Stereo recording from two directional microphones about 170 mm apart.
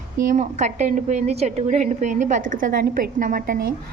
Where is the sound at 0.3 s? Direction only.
45° right (ahead or behind).